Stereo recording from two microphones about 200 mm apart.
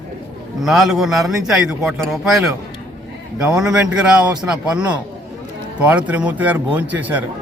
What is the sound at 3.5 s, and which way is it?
Speech, 5° right (ahead or behind).